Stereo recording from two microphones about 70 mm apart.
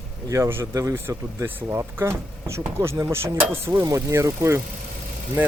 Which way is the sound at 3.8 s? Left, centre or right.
Right.